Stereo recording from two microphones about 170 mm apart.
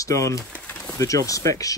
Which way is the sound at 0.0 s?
20° left (ahead or behind).